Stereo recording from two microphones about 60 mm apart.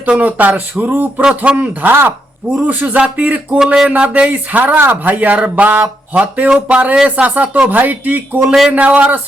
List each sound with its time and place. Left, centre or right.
0.0 s speech: right
1.9 s speech: right
2.6 s speech: right
8.4 s speech: centre
8.7 s speech: right